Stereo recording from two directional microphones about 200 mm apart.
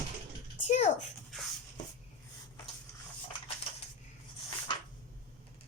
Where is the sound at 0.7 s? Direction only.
35° left (ahead or behind).